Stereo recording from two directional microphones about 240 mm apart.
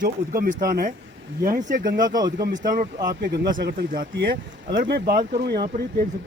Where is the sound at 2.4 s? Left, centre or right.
Right.